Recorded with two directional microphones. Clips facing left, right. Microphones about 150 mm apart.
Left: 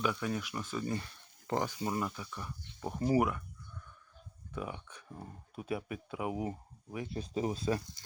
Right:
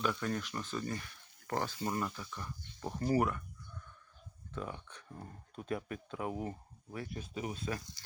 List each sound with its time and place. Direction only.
0.0 s speech: 10° left (ahead or behind)
0.9 s a sound: 25° left (ahead or behind)
1.5 s speech: 15° left (ahead or behind)
4.5 s speech: 10° left (ahead or behind)
7.1 s speech: 35° left (ahead or behind)